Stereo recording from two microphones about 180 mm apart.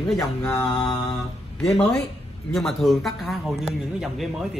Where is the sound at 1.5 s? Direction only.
5° left (ahead or behind).